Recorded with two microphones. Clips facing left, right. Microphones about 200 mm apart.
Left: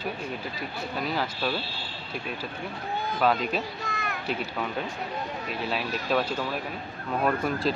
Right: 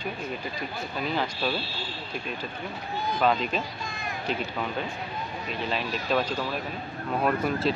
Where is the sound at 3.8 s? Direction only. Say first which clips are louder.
Left 2 dB; 65° left (ahead or behind).